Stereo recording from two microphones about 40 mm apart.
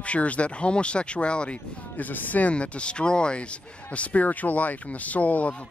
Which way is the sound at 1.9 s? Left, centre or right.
Left.